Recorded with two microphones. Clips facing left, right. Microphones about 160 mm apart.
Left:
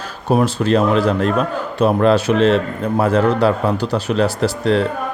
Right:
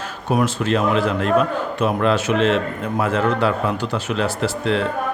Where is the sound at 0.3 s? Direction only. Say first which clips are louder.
Left 4 dB; 35° left (ahead or behind).